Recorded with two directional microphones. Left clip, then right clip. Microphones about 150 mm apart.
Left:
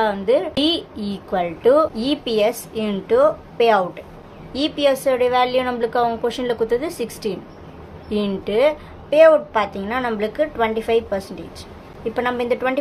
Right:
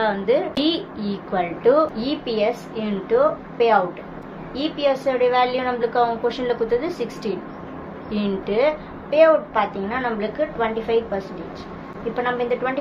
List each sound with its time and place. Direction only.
0.0 s a woman's voice: 50° left (ahead or behind); by 12.7 s 75° left (ahead or behind)